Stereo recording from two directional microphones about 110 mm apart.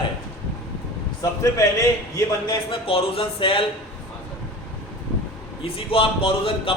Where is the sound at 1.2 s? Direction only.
30° left (ahead or behind).